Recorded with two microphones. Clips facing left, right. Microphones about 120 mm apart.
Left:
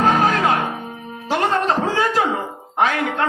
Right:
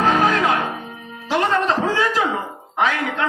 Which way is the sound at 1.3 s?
45° left (ahead or behind).